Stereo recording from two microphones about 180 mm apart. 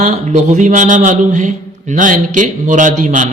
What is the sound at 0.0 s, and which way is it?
A man's voice, 40° right (ahead or behind).